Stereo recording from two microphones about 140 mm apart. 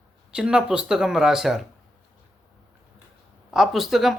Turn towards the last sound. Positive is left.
turn(degrees=0)  # may be behind; listen again after turning